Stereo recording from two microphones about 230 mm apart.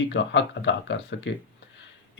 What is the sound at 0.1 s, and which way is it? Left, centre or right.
Speech, left.